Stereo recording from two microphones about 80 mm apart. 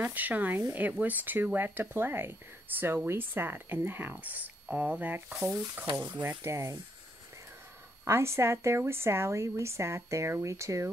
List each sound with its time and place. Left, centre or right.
0.0 s speech: right
6.4 s a woman's voice: right
8.0 s a woman's voice: right